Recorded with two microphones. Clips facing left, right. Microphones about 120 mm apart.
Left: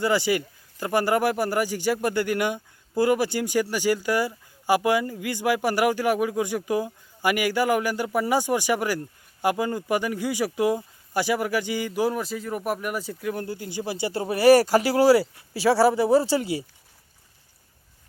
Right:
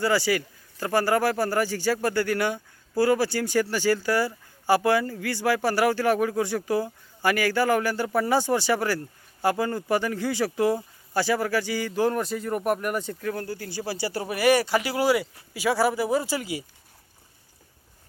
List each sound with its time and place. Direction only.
0.0 s speech: 20° left (ahead or behind)
13.3 s speech: 20° left (ahead or behind)